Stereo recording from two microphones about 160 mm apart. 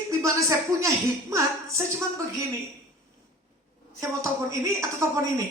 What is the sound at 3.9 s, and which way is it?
Speech, 20° right (ahead or behind).